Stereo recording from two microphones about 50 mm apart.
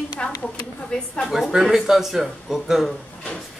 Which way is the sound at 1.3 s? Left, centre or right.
Centre.